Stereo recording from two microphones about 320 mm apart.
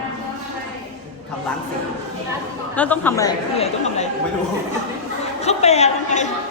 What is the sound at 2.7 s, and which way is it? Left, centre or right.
Speech, centre.